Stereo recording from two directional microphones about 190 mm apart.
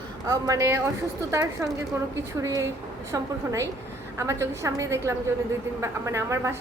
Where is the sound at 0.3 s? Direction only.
20° right (ahead or behind).